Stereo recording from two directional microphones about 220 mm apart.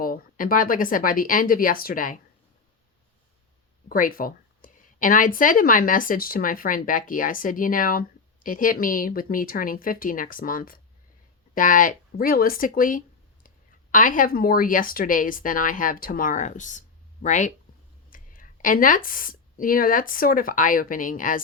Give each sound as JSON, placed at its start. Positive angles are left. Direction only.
{"t": 0.0, "sound": "speech", "side_deg": 40}
{"t": 3.8, "sound": "a woman's voice", "side_deg": 40}